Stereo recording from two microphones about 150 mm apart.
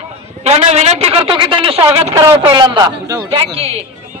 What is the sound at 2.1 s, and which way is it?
A man's voice, 20° right (ahead or behind).